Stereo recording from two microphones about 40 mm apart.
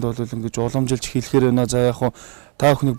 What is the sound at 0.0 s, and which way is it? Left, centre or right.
Speech, centre.